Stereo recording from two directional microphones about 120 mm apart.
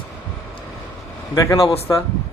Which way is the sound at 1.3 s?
25° left (ahead or behind).